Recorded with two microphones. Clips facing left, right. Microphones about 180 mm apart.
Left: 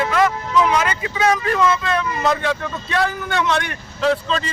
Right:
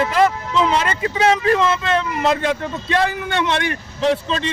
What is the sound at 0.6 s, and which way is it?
Speech, 35° right (ahead or behind).